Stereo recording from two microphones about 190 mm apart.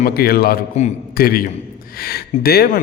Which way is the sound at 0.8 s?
40° left (ahead or behind).